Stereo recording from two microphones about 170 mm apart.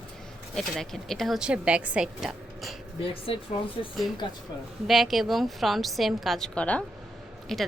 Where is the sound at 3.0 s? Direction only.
35° left (ahead or behind).